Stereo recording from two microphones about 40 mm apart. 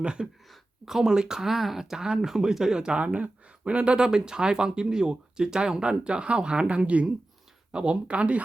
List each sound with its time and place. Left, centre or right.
0.0 s speech: right
0.9 s speech: centre
3.0 s speech: right
3.9 s speech: centre